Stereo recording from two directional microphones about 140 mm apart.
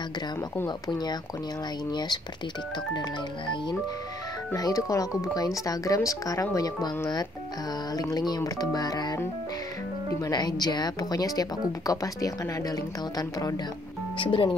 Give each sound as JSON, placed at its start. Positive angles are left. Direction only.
{"t": 0.7, "sound": "speech", "side_deg": 30}
{"t": 4.6, "sound": "speech", "side_deg": 25}
{"t": 7.9, "sound": "speech", "side_deg": 25}
{"t": 10.2, "sound": "speech", "side_deg": 30}
{"t": 14.1, "sound": "speech", "side_deg": 35}